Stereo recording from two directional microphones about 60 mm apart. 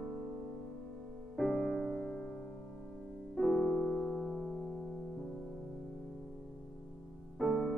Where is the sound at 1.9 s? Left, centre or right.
Left.